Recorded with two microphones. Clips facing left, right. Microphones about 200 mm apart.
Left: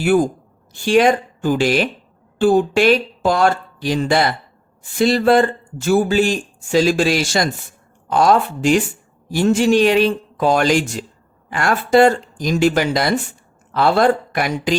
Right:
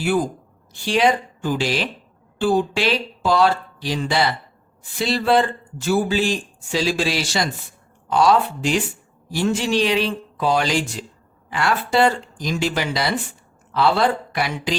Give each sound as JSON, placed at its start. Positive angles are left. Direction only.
{"t": 0.7, "sound": "a man's voice", "side_deg": 50}